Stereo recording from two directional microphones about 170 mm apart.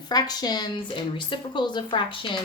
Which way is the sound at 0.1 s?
25° left (ahead or behind).